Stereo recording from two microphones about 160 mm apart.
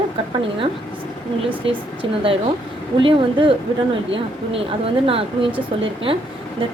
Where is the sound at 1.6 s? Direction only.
35° right (ahead or behind).